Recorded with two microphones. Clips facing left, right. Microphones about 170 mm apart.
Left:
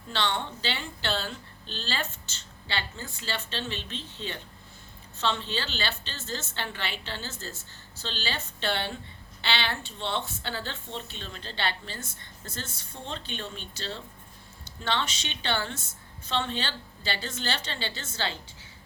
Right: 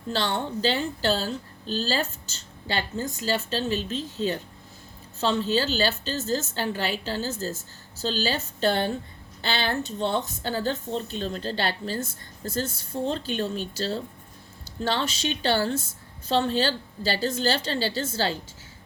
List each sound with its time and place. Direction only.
0.1 s speech: 45° right (ahead or behind)